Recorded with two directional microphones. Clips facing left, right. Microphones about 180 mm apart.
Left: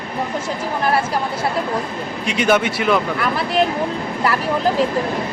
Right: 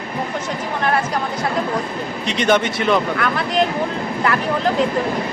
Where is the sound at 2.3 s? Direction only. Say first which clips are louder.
Even; 5° left (ahead or behind).